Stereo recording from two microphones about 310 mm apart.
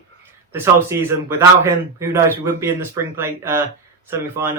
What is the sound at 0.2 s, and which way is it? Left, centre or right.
A man's voice, centre.